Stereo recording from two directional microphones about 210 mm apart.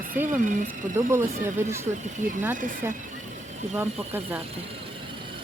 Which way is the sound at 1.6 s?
10° right (ahead or behind).